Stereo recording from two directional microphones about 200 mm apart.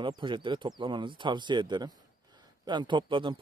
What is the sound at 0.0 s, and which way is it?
Speech, 25° right (ahead or behind).